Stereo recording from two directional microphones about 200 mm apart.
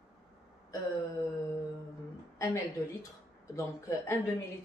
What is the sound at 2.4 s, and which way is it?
Speech, 15° left (ahead or behind).